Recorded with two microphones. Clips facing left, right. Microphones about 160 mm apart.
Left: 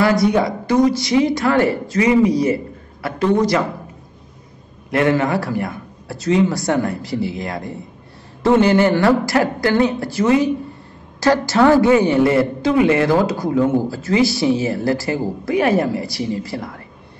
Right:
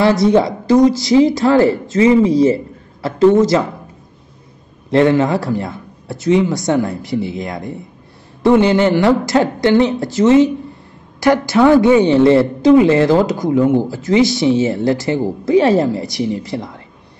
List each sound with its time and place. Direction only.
0.0 s a woman's voice: 25° right (ahead or behind)
4.9 s a woman's voice: 20° right (ahead or behind)